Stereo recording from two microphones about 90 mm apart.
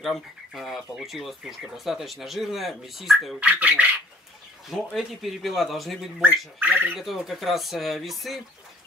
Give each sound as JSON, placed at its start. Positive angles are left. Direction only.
{"t": 0.0, "sound": "speech", "side_deg": 0}
{"t": 3.3, "sound": "speech", "side_deg": -15}
{"t": 4.6, "sound": "speech", "side_deg": 0}
{"t": 6.2, "sound": "speech", "side_deg": -20}
{"t": 7.0, "sound": "speech", "side_deg": 0}